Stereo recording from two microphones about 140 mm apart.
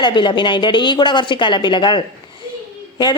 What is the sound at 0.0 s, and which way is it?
A woman's voice, 35° left (ahead or behind).